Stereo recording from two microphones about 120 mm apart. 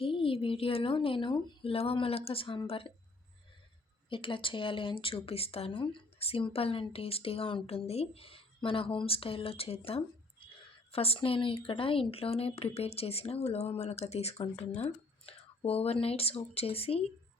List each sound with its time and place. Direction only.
0.0 s speech: 50° left (ahead or behind)
4.1 s speech: 45° left (ahead or behind)